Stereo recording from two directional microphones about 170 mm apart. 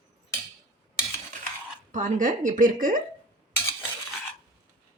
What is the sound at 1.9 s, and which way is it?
A woman's voice, 45° right (ahead or behind).